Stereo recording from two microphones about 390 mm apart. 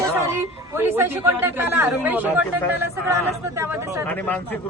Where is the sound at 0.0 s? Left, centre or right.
Centre.